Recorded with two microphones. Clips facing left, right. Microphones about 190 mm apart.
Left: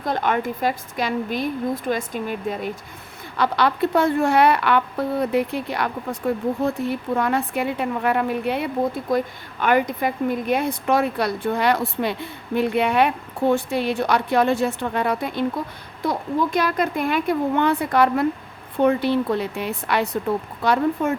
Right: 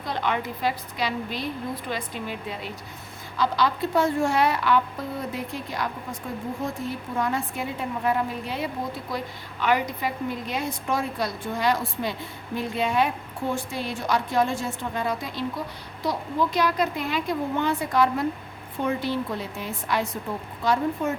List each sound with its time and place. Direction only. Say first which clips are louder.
0.0 s a woman's voice: left 5 dB; 50° left (ahead or behind)
3.3 s a woman's voice: left 3 dB; 65° left (ahead or behind)
20.7 s a woman's voice: left 4 dB; 55° left (ahead or behind)